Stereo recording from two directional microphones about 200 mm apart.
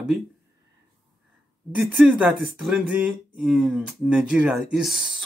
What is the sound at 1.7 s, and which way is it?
Speech, centre (ahead or behind).